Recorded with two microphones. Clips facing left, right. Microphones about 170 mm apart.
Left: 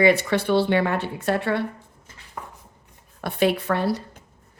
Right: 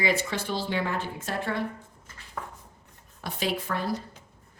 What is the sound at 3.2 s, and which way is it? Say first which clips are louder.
Speech: left 9 dB; 60° left (ahead or behind).